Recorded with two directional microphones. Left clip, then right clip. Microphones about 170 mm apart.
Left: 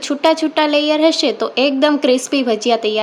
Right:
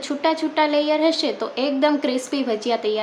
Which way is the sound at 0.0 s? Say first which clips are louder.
Left 7 dB; 40° left (ahead or behind).